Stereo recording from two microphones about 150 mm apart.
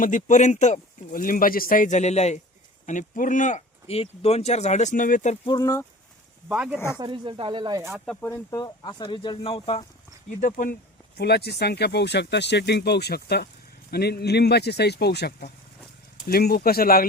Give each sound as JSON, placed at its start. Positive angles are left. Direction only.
{"t": 0.0, "sound": "speech", "side_deg": 55}
{"t": 5.5, "sound": "speech", "side_deg": 25}
{"t": 6.5, "sound": "speech", "side_deg": -5}
{"t": 6.7, "sound": "speech", "side_deg": 15}
{"t": 7.0, "sound": "speech", "side_deg": -35}
{"t": 7.9, "sound": "speech", "side_deg": 0}
{"t": 8.2, "sound": "speech", "side_deg": 25}
{"t": 10.4, "sound": "speech", "side_deg": 70}
{"t": 11.2, "sound": "speech", "side_deg": 90}